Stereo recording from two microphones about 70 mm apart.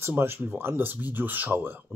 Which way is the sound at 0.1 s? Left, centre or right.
Right.